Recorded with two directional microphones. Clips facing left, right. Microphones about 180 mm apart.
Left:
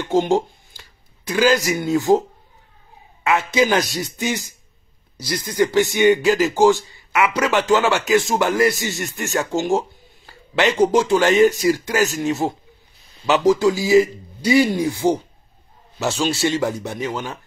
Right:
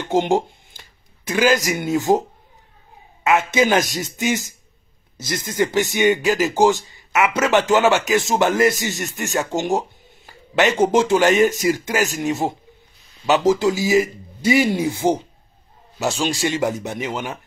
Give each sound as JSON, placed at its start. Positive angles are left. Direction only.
{"t": 0.1, "sound": "speech", "side_deg": -20}
{"t": 3.3, "sound": "a man's voice", "side_deg": -20}
{"t": 5.2, "sound": "a man's voice", "side_deg": -20}
{"t": 16.2, "sound": "speech", "side_deg": -15}